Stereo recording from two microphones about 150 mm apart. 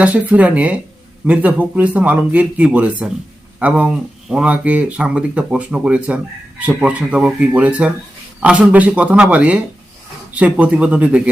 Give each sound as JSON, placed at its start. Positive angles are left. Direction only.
{"t": 0.0, "sound": "speech", "side_deg": -10}